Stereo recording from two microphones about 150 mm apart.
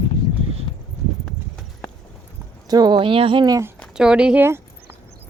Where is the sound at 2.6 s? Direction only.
25° right (ahead or behind).